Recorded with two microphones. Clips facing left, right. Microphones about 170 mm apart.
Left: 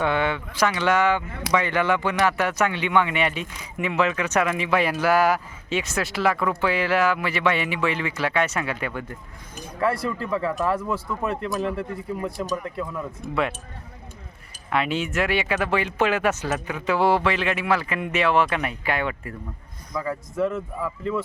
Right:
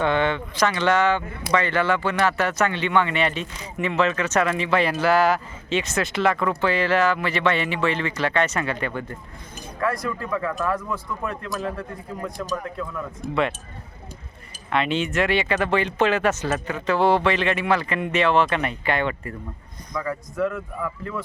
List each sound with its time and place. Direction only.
0.0 s speech: 10° left (ahead or behind)
9.8 s speech: 30° left (ahead or behind)
14.7 s speech: 5° left (ahead or behind)
20.0 s speech: 25° left (ahead or behind)